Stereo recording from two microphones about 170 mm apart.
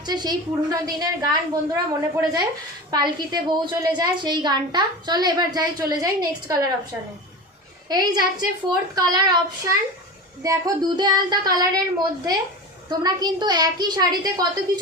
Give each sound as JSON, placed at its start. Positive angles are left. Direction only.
{"t": 0.0, "sound": "a woman's voice", "side_deg": -25}
{"t": 7.9, "sound": "a woman's voice", "side_deg": -25}